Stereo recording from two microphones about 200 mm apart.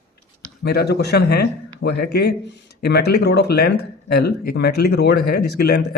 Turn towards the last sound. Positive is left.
turn(degrees=50)  # may be behind; listen again after turning